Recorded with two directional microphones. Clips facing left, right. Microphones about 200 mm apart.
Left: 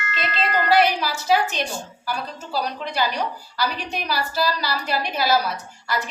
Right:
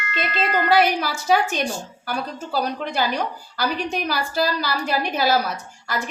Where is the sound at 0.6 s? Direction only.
55° right (ahead or behind).